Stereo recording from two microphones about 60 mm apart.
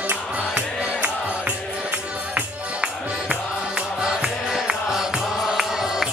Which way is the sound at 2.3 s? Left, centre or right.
Centre.